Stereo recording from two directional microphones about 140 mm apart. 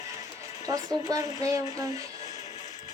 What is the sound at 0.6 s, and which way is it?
Speech, 25° right (ahead or behind).